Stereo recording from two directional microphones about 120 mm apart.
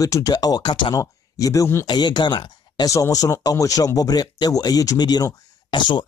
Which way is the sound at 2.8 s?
25° left (ahead or behind).